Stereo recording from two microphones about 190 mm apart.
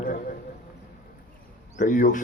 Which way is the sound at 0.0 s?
50° left (ahead or behind).